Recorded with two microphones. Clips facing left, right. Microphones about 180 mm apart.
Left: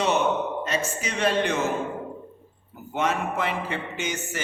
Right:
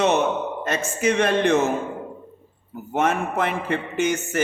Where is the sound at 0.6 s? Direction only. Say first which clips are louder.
Right 6 dB; 55° right (ahead or behind).